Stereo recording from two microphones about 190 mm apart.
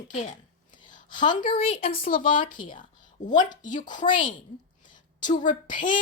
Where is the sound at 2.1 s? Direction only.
45° left (ahead or behind).